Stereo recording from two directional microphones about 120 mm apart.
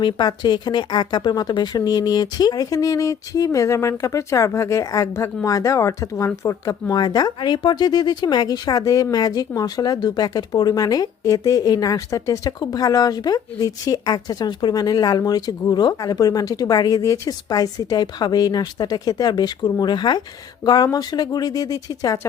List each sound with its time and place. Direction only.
0.0 s speech: 40° left (ahead or behind)